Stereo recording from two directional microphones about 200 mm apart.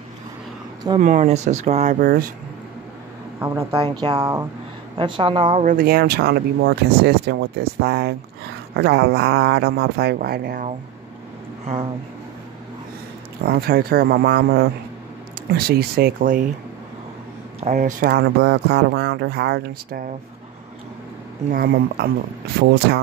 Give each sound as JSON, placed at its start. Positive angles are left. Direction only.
{"t": 1.0, "sound": "speech", "side_deg": -35}
{"t": 2.0, "sound": "speech", "side_deg": -45}
{"t": 3.3, "sound": "speech", "side_deg": -10}
{"t": 5.6, "sound": "speech", "side_deg": -40}
{"t": 13.5, "sound": "speech", "side_deg": -50}
{"t": 17.6, "sound": "speech", "side_deg": -35}
{"t": 21.5, "sound": "speech", "side_deg": -50}